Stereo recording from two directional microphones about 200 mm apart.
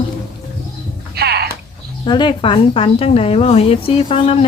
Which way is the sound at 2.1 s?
25° left (ahead or behind).